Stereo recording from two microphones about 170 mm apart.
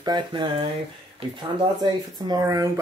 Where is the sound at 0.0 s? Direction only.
25° right (ahead or behind).